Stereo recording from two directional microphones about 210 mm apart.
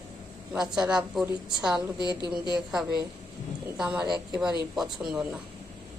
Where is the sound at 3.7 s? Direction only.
5° right (ahead or behind).